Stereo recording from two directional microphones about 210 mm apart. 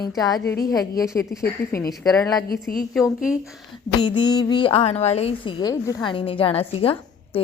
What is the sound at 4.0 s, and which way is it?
A woman's voice, 20° left (ahead or behind).